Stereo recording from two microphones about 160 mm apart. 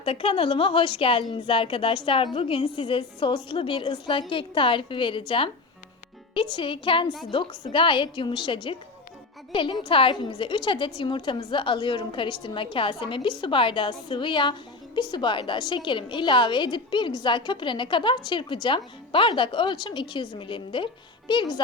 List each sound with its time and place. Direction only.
0.0 s a woman's voice: 35° left (ahead or behind)